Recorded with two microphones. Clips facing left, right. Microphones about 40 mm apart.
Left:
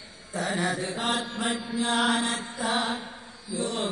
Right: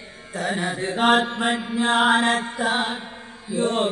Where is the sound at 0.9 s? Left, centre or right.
Right.